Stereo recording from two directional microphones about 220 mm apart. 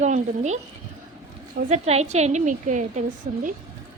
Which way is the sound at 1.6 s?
30° right (ahead or behind).